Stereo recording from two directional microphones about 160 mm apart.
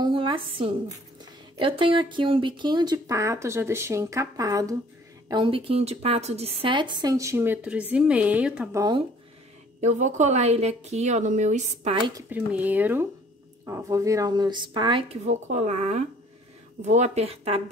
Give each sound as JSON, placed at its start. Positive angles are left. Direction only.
{"t": 0.0, "sound": "a woman's voice", "side_deg": -30}
{"t": 5.3, "sound": "a woman's voice", "side_deg": -35}
{"t": 8.7, "sound": "a woman's voice", "side_deg": -25}
{"t": 9.8, "sound": "a woman's voice", "side_deg": -50}
{"t": 12.3, "sound": "a woman's voice", "side_deg": -10}
{"t": 15.2, "sound": "a woman's voice", "side_deg": -45}